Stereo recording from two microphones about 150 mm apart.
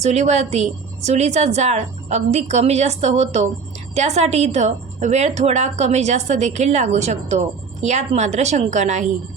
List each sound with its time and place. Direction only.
0.0 s a woman's voice: 45° right (ahead or behind)